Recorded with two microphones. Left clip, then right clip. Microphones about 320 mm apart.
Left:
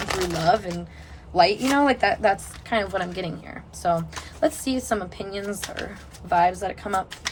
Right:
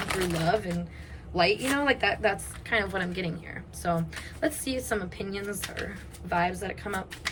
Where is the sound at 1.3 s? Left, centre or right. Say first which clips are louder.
Left 6 dB; centre.